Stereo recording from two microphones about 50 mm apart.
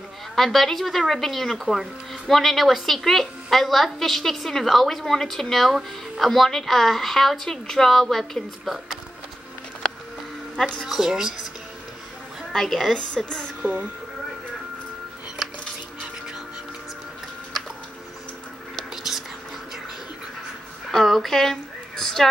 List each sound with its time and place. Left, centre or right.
0.4 s speech: centre
10.9 s speech: centre
12.5 s a woman's voice: centre
12.9 s speech: centre
13.6 s speech: right
20.9 s a sound: centre